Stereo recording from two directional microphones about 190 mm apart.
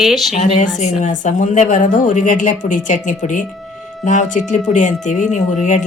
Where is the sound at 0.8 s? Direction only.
40° left (ahead or behind).